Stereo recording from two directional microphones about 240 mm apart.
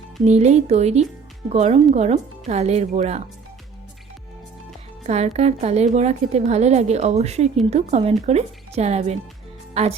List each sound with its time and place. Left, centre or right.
0.3 s a woman's voice: right
5.0 s a woman's voice: right